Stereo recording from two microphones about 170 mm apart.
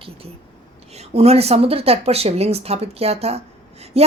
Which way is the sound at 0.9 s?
40° right (ahead or behind).